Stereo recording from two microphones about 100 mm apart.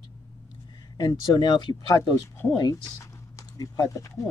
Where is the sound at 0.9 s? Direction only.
40° left (ahead or behind).